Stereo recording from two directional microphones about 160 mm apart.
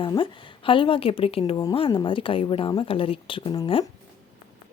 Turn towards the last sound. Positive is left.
turn(degrees=30)  # may be behind; listen again after turning